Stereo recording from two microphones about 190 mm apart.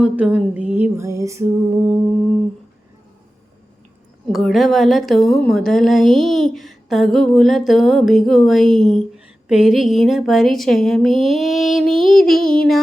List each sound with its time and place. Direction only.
0.0 s music: 5° right (ahead or behind)
4.3 s a woman's voice: centre (ahead or behind)